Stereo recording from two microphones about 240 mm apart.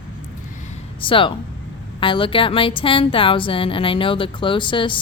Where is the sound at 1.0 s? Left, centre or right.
Left.